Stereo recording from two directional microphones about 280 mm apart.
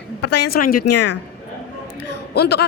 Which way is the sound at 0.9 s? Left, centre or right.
Left.